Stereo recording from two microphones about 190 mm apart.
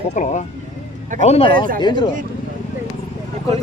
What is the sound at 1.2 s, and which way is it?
Speech, 30° left (ahead or behind).